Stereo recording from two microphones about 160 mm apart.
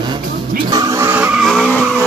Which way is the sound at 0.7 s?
20° right (ahead or behind).